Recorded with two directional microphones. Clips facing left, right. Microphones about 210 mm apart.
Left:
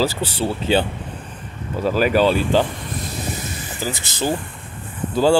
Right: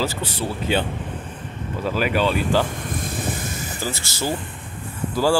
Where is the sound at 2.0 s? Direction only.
40° left (ahead or behind).